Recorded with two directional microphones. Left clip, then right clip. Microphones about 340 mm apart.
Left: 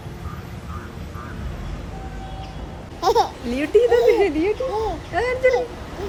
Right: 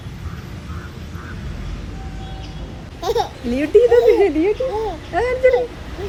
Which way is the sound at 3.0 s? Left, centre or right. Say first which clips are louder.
Left 2 dB; left.